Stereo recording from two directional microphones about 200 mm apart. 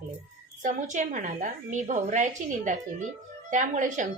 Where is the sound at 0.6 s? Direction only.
40° right (ahead or behind).